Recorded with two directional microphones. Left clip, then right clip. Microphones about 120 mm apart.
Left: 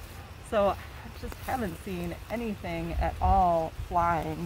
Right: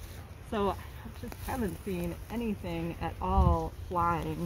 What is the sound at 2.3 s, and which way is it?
Speech, 35° left (ahead or behind).